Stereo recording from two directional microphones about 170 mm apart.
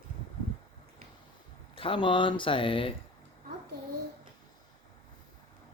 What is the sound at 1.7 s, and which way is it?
Speech, 30° left (ahead or behind).